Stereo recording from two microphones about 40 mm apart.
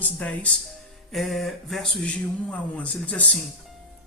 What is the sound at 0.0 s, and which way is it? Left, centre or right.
Speech, left.